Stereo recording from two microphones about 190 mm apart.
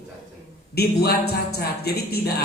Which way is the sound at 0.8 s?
55° left (ahead or behind).